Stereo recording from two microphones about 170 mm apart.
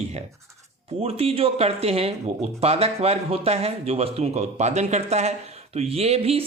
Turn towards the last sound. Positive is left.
turn(degrees=-35)  # may be behind; listen again after turning